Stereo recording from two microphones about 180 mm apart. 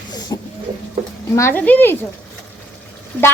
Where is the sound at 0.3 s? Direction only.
20° left (ahead or behind).